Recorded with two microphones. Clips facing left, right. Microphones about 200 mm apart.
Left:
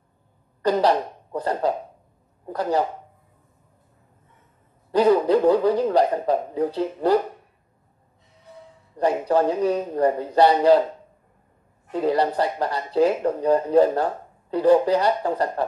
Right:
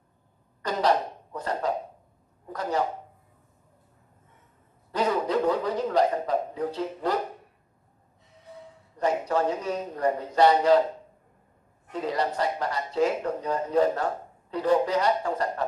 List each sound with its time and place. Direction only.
0.6 s a sound: 35° left (ahead or behind)
4.9 s a man's voice: 30° left (ahead or behind)
8.9 s a man's voice: 30° left (ahead or behind)
11.9 s a man's voice: 30° left (ahead or behind)